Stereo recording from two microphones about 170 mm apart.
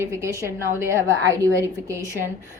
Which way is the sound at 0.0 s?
15° right (ahead or behind).